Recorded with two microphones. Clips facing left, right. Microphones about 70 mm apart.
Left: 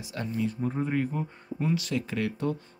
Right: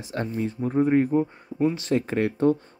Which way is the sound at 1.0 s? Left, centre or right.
Right.